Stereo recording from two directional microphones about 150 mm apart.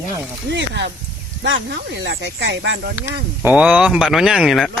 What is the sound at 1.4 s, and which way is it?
Speech, 90° right.